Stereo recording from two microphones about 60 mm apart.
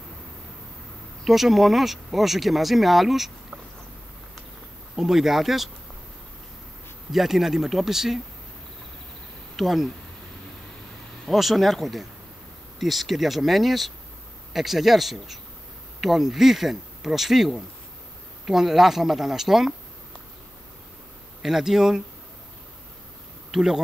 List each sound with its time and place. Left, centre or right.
1.2 s speech: centre
4.9 s speech: centre
7.1 s speech: centre
9.6 s speech: centre
11.2 s speech: centre
21.4 s speech: centre
23.5 s speech: centre